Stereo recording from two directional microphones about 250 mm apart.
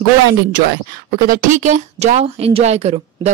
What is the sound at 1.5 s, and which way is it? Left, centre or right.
A woman's voice, right.